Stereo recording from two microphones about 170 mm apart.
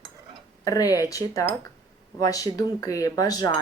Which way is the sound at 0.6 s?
20° left (ahead or behind).